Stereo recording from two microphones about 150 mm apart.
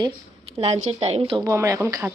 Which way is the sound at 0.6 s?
45° right (ahead or behind).